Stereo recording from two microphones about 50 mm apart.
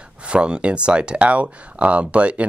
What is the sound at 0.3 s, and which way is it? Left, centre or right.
Speech, right.